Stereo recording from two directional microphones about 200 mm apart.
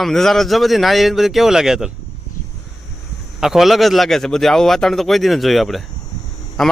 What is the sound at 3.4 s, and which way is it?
A man's voice, centre (ahead or behind).